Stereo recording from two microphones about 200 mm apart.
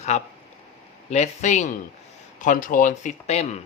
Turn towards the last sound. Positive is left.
turn(degrees=35)  # may be behind; listen again after turning